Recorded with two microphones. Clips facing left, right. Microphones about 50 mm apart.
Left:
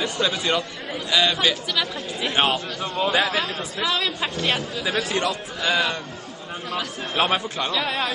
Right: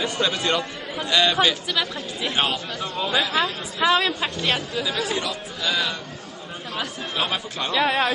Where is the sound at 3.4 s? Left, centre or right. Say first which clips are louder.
Right 3 dB; centre.